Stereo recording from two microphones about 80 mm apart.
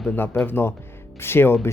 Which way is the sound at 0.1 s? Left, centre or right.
Left.